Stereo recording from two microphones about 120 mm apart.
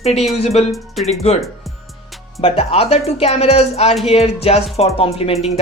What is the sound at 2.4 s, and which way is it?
Speech, 55° left (ahead or behind).